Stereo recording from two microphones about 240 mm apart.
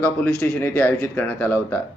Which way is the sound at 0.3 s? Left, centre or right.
Centre.